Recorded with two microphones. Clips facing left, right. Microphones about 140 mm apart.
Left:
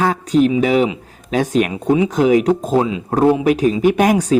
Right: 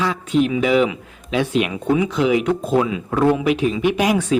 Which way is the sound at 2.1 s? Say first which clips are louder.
Left 4 dB; 40° left (ahead or behind).